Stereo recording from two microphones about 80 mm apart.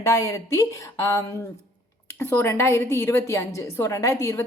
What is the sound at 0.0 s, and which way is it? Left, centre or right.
A woman's voice, left.